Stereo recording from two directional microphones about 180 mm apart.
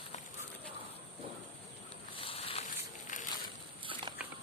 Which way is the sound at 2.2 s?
30° left (ahead or behind).